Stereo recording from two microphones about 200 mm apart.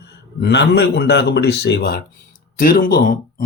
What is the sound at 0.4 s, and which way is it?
Speech, 55° left (ahead or behind).